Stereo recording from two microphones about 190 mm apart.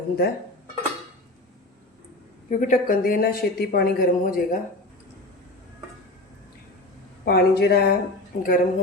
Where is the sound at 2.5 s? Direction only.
45° left (ahead or behind).